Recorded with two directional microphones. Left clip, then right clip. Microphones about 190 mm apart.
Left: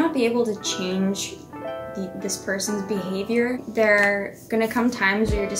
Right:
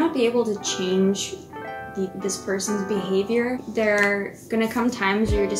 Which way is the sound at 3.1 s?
20° left (ahead or behind).